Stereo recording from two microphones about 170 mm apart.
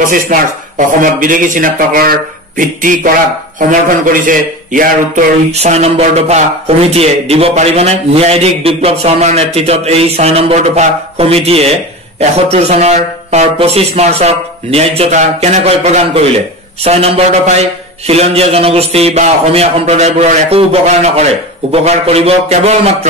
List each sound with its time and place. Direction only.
0.0 s speech: 50° right (ahead or behind)
5.5 s a man's voice: 40° right (ahead or behind)